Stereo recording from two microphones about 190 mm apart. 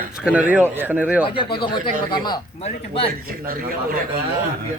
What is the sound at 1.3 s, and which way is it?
Speech, 25° left (ahead or behind).